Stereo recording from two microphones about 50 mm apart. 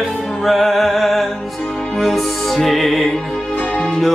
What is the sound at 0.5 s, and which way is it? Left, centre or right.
Music, centre.